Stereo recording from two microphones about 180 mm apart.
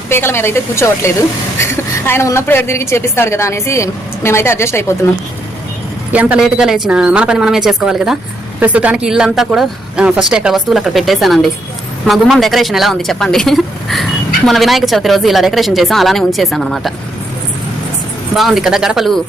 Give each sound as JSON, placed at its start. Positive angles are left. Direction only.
{"t": 0.1, "sound": "a woman's voice", "side_deg": 15}
{"t": 6.1, "sound": "speech", "side_deg": -10}
{"t": 18.3, "sound": "speech", "side_deg": 0}